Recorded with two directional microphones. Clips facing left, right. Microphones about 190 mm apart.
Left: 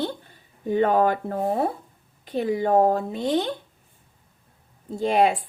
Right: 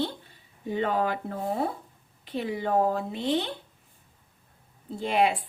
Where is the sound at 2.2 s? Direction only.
45° left (ahead or behind).